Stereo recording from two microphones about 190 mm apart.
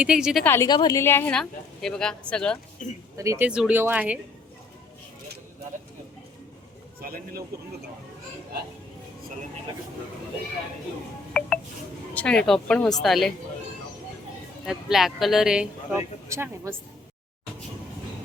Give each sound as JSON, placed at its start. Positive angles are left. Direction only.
{"t": 0.0, "sound": "speech", "side_deg": -5}
{"t": 0.4, "sound": "a woman's voice", "side_deg": 15}
{"t": 2.8, "sound": "speech", "side_deg": 45}
{"t": 3.2, "sound": "speech", "side_deg": -15}
{"t": 7.0, "sound": "a sound", "side_deg": -50}
{"t": 11.3, "sound": "telephone dialing", "side_deg": 5}
{"t": 12.1, "sound": "speech", "side_deg": 5}
{"t": 14.6, "sound": "speech", "side_deg": 0}